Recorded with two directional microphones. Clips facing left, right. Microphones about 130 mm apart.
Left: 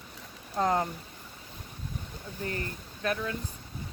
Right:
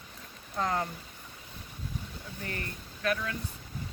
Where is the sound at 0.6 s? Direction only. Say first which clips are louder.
Left 4 dB; 30° left (ahead or behind).